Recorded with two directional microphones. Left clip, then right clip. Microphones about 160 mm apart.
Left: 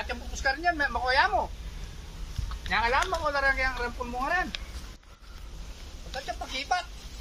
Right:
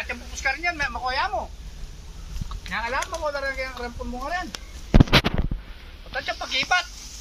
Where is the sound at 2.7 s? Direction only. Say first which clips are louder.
Left 2 dB; 50° left (ahead or behind).